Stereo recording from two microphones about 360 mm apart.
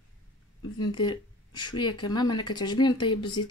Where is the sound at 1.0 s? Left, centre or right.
Centre.